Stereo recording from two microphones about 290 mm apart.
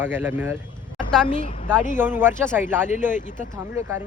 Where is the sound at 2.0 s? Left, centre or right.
Centre.